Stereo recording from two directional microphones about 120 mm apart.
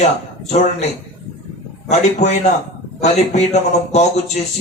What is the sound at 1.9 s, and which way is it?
A man's voice, 75° left (ahead or behind).